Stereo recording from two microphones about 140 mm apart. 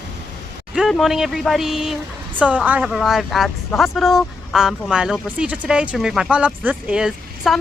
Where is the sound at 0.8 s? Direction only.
Centre (ahead or behind).